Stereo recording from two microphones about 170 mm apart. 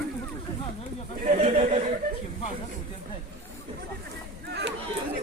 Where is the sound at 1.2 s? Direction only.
45° right (ahead or behind).